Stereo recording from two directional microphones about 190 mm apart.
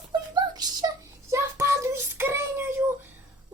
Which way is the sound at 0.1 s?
20° right (ahead or behind).